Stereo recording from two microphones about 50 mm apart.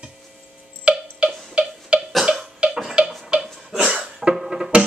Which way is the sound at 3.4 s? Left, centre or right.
Centre.